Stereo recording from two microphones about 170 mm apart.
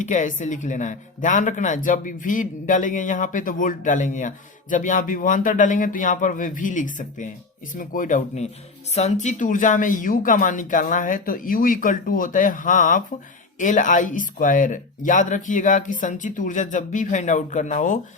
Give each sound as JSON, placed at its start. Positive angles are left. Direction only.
{"t": 0.0, "sound": "speech", "side_deg": 45}